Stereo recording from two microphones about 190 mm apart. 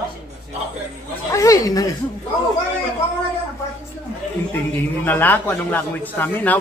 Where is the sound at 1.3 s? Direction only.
15° left (ahead or behind).